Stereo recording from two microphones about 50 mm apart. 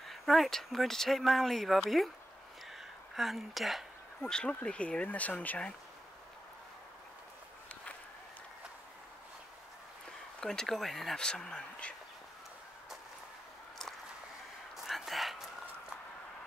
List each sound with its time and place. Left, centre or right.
0.0 s speech: centre
3.2 s speech: centre
4.2 s speech: centre; by 5.6 s left
10.4 s speech: centre
11.1 s speech: centre
11.8 s speech: left
14.9 s a sound: centre